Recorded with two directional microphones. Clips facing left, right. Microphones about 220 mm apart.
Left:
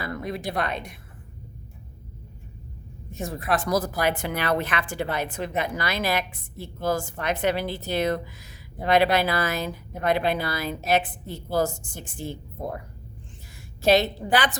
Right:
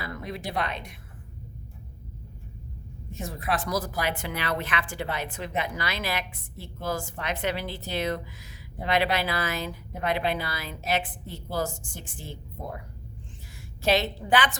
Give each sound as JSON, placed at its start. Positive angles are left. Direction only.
{"t": 0.0, "sound": "a woman's voice", "side_deg": 50}
{"t": 3.2, "sound": "a woman's voice", "side_deg": 45}
{"t": 13.5, "sound": "a woman's voice", "side_deg": 40}